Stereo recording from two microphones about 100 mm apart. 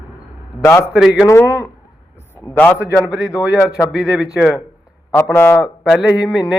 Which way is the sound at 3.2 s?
30° left (ahead or behind).